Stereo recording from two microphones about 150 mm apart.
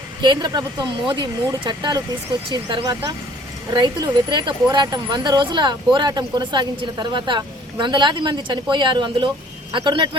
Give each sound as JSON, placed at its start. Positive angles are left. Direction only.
{"t": 0.2, "sound": "speech", "side_deg": -30}